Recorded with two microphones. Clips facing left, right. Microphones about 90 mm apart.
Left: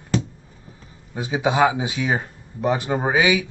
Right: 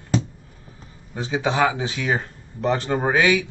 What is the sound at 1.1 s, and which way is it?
Speech, 15° left (ahead or behind).